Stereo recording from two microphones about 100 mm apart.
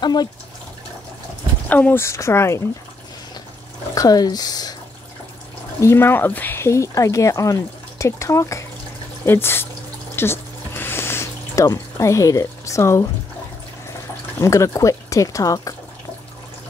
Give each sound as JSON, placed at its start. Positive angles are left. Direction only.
{"t": 0.0, "sound": "speech", "side_deg": 45}
{"t": 1.7, "sound": "speech", "side_deg": 15}
{"t": 3.9, "sound": "speech", "side_deg": 40}
{"t": 5.8, "sound": "speech", "side_deg": 25}
{"t": 10.1, "sound": "a sound", "side_deg": 25}
{"t": 14.4, "sound": "speech", "side_deg": 30}